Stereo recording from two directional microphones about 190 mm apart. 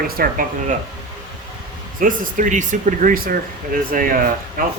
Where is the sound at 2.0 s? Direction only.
45° right (ahead or behind).